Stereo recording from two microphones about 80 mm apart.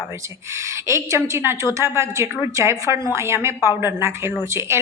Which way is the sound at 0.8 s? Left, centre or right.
Right.